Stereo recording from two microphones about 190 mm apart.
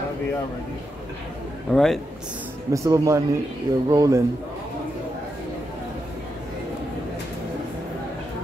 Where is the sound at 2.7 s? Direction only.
15° right (ahead or behind).